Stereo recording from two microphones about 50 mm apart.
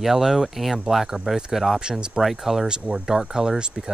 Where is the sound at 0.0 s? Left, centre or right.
Centre.